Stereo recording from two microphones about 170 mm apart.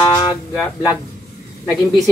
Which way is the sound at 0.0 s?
25° left (ahead or behind).